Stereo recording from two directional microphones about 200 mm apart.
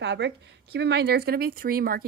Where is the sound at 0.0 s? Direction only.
60° right (ahead or behind).